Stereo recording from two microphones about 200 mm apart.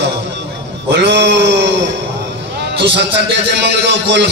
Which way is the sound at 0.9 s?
60° right (ahead or behind).